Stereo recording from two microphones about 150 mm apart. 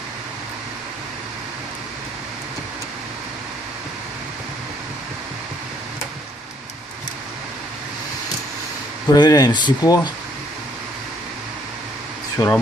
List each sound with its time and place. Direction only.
9.0 s speech: 25° left (ahead or behind)
12.4 s speech: 20° left (ahead or behind)